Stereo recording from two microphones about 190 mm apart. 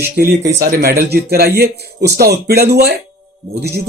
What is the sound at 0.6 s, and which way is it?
Speech, 55° right (ahead or behind).